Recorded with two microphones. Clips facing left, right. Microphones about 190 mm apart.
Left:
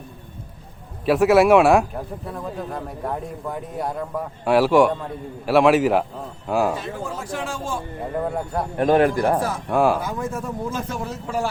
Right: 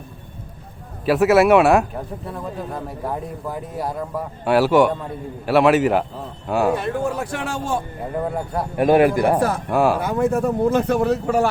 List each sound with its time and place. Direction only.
1.0 s speech: centre (ahead or behind)
6.7 s speech: 65° right (ahead or behind)
8.2 s a man's voice: centre (ahead or behind)
10.0 s speech: 65° right (ahead or behind)